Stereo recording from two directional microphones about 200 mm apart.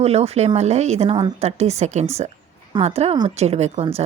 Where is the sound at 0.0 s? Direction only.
30° right (ahead or behind).